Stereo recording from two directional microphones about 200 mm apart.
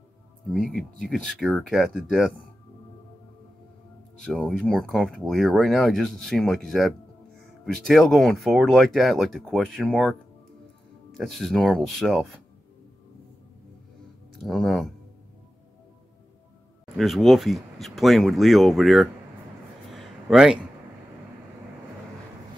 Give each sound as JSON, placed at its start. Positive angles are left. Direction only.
{"t": 0.5, "sound": "speech", "side_deg": 0}
{"t": 4.2, "sound": "speech", "side_deg": 0}
{"t": 11.1, "sound": "speech", "side_deg": 0}
{"t": 14.3, "sound": "speech", "side_deg": 0}
{"t": 16.9, "sound": "speech", "side_deg": 0}
{"t": 19.9, "sound": "a sound", "side_deg": 0}